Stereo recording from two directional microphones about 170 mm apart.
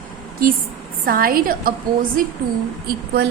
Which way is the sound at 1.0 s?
60° right (ahead or behind).